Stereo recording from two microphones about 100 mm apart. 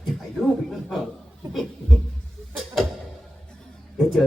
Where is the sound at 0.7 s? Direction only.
Centre (ahead or behind).